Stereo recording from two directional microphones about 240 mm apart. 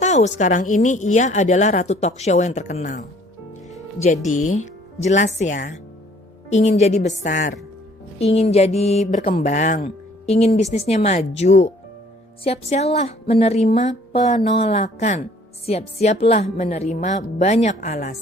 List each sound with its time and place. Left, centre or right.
0.0 s speech: left